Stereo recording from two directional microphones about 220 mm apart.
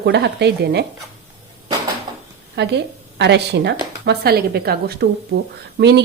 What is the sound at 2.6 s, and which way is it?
A woman's voice, 50° right (ahead or behind).